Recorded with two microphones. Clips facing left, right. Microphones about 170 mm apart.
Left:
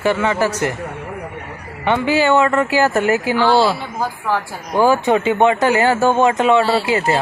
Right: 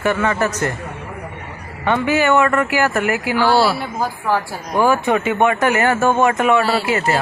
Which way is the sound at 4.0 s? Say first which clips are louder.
Right 2 dB; 10° right (ahead or behind).